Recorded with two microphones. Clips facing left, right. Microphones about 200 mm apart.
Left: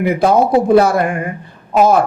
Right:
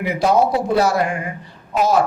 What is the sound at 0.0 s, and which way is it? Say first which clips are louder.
A man's voice: left 4 dB; 55° left (ahead or behind).